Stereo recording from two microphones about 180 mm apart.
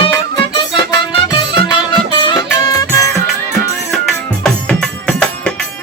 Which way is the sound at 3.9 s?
Centre (ahead or behind).